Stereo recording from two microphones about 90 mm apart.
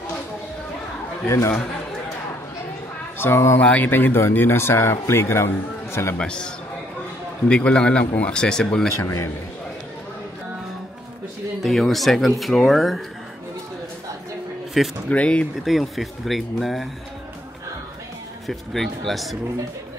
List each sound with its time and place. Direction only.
3.2 s speech: 30° left (ahead or behind)
3.6 s speech: 15° left (ahead or behind)
6.1 s speech: 10° left (ahead or behind)
9.0 s a man's voice: 35° left (ahead or behind)
11.6 s speech: centre (ahead or behind)
15.0 s speech: 15° left (ahead or behind)
15.5 s speech: centre (ahead or behind)
18.5 s speech: centre (ahead or behind)